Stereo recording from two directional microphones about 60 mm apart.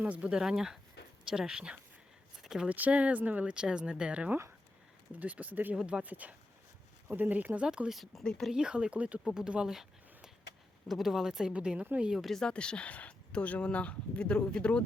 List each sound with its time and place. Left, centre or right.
0.0 s speech: right
2.4 s a sound: centre
2.6 s speech: right
5.7 s speech: centre
7.9 s speech: centre
8.2 s speech: centre
8.5 s speech: centre
10.8 s speech: centre
12.1 s speech: centre
12.4 s speech: centre